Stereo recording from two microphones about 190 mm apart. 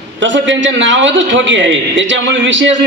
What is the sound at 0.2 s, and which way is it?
A man's voice, 70° right (ahead or behind).